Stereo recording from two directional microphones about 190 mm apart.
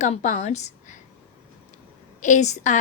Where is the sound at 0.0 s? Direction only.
40° left (ahead or behind).